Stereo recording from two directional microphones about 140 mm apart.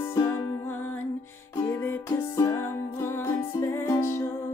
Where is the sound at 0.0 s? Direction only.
25° left (ahead or behind).